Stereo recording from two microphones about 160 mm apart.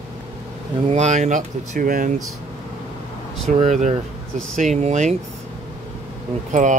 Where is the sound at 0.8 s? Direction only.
45° right (ahead or behind).